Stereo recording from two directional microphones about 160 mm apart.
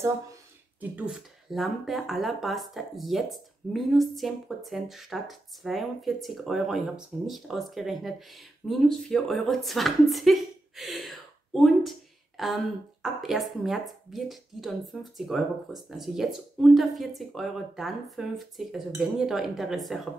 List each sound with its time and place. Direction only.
0.7 s speech: 10° right (ahead or behind)